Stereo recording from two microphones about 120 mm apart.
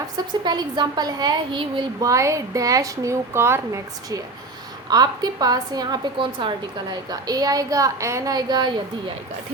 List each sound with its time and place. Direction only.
0.4 s a woman's voice: 35° right (ahead or behind)
4.9 s a woman's voice: 35° right (ahead or behind)